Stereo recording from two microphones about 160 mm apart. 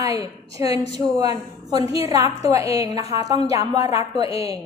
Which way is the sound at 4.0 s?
35° left (ahead or behind).